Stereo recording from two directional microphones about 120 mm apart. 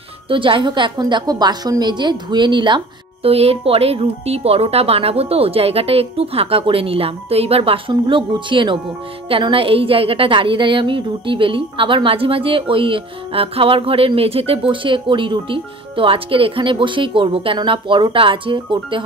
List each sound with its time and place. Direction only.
0.3 s a woman's voice: 45° right (ahead or behind)
3.3 s a woman's voice: 55° right (ahead or behind)